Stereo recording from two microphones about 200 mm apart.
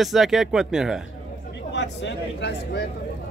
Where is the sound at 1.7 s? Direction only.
60° left (ahead or behind).